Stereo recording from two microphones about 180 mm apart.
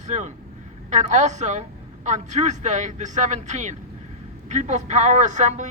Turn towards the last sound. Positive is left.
turn(degrees=-40)  # may be behind; listen again after turning